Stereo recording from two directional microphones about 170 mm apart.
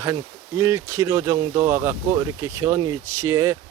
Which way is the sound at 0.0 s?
20° right (ahead or behind).